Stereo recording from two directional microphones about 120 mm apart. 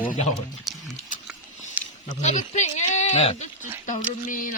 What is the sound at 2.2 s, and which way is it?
Speech, 75° left (ahead or behind).